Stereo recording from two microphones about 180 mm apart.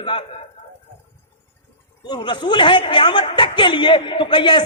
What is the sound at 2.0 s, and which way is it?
Speech, 25° left (ahead or behind).